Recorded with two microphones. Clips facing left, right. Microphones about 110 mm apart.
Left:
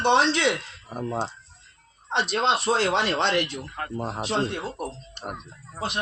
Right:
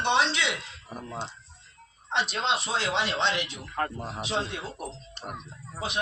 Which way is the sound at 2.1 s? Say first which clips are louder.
Left 4 dB; 55° left (ahead or behind).